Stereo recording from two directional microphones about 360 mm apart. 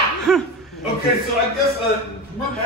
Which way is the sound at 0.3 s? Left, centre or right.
Centre.